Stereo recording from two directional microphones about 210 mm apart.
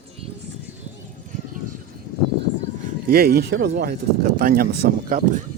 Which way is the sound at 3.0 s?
45° right (ahead or behind).